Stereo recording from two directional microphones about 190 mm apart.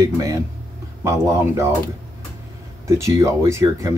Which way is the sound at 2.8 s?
15° right (ahead or behind).